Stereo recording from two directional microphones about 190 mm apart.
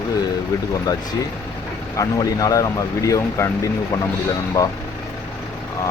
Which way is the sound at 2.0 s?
20° left (ahead or behind).